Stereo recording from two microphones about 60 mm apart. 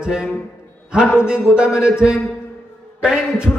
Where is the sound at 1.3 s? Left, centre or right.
Centre.